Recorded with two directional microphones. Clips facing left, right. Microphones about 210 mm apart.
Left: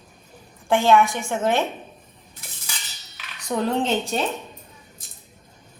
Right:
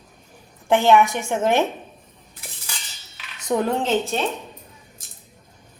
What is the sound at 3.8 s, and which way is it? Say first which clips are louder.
Speech: right 1 dB; centre (ahead or behind).